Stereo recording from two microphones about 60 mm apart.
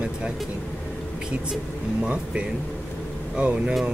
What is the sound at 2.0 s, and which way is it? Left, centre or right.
Speech, right.